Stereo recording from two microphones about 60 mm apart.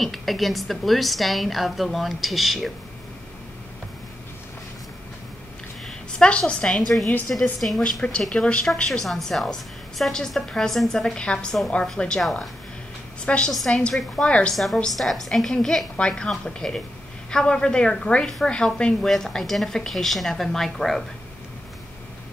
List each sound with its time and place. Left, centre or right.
0.0 s a woman's voice: centre
5.9 s a woman's voice: centre
8.3 s a woman's voice: centre
13.2 s a woman's voice: centre
14.5 s a woman's voice: centre